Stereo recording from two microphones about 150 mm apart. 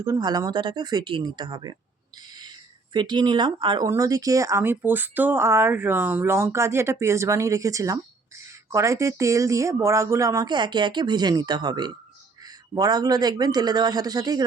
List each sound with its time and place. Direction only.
0.0 s speech: 25° right (ahead or behind)
2.9 s speech: 30° right (ahead or behind)
3.8 s speech: 20° right (ahead or behind)